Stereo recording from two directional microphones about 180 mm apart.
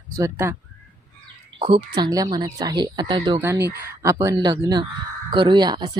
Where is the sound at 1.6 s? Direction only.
25° right (ahead or behind).